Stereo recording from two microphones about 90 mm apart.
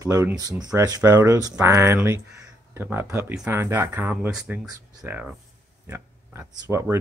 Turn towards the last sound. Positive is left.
turn(degrees=-30)  # may be behind; listen again after turning